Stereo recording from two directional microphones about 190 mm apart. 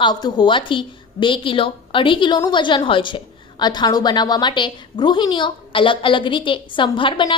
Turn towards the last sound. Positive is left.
turn(degrees=25)  # may be behind; listen again after turning